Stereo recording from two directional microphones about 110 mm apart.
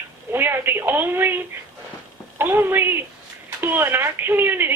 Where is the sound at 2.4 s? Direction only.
20° right (ahead or behind).